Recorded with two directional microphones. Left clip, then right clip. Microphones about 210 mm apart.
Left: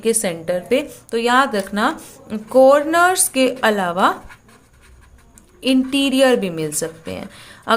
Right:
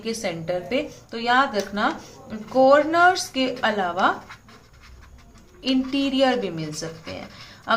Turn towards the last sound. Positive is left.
turn(degrees=50)  # may be behind; listen again after turning